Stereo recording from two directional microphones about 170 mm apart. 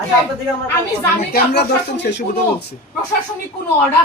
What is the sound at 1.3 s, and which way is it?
Speech, 75° left (ahead or behind).